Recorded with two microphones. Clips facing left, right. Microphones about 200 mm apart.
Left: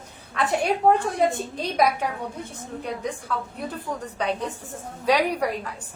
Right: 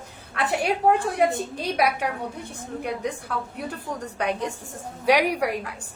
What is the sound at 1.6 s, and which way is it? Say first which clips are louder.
A woman's voice: left 2 dB; 10° right (ahead or behind).